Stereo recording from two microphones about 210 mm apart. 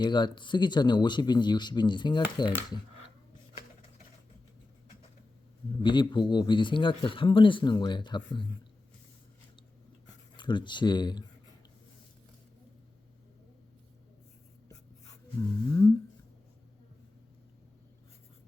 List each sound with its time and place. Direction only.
0.0 s speech: 20° left (ahead or behind)
5.8 s speech: 20° left (ahead or behind)
10.3 s speech: 20° left (ahead or behind)
15.7 s a sound: 10° left (ahead or behind)